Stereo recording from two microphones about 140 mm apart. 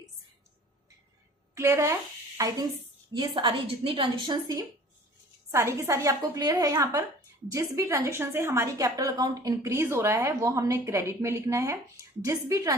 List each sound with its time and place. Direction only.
1.5 s a woman's voice: 20° right (ahead or behind)
3.2 s a woman's voice: 35° right (ahead or behind)